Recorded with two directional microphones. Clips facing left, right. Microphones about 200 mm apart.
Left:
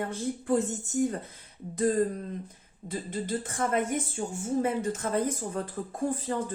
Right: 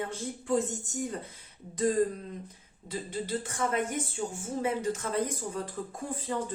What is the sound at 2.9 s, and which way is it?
A woman's voice, 50° left (ahead or behind).